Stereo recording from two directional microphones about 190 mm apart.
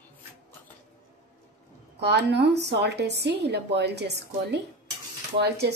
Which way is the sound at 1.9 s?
65° right (ahead or behind).